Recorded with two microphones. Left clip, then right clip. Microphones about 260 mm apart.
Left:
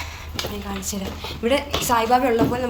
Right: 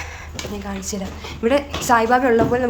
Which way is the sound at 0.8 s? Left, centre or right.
Centre.